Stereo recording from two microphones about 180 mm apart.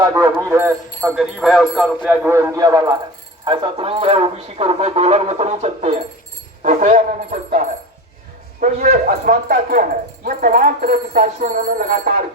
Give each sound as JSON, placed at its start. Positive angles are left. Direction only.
{"t": 0.4, "sound": "a man's voice", "side_deg": -15}
{"t": 1.0, "sound": "speech", "side_deg": 0}
{"t": 2.0, "sound": "a man's voice", "side_deg": -10}
{"t": 8.6, "sound": "speech", "side_deg": -50}